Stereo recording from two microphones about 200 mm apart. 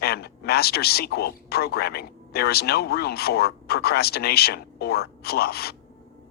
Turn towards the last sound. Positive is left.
turn(degrees=50)  # may be behind; listen again after turning